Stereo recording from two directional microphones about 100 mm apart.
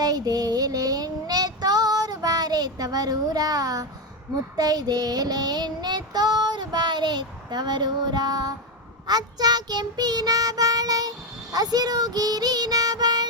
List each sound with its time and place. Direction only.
0.0 s child singing: 40° right (ahead or behind)